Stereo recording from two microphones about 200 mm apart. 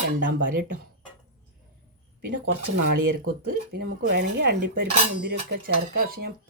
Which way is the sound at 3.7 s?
50° right (ahead or behind).